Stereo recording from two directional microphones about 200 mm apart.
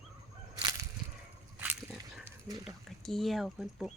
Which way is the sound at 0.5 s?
15° right (ahead or behind).